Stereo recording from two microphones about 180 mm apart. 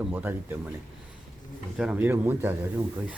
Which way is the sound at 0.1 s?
10° right (ahead or behind).